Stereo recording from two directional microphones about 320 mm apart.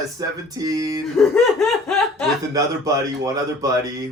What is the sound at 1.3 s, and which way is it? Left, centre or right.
Speech, centre.